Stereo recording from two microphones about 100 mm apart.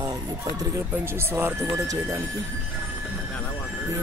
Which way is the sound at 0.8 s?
25° right (ahead or behind).